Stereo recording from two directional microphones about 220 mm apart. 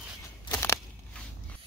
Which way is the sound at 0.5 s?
10° left (ahead or behind).